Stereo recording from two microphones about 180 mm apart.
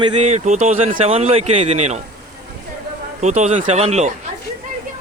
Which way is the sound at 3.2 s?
40° right (ahead or behind).